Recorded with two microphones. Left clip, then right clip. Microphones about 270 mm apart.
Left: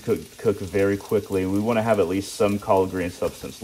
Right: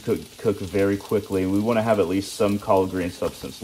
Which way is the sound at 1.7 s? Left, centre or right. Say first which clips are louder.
Even; centre.